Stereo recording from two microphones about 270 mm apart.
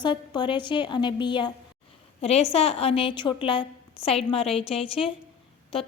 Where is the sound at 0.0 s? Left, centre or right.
Centre.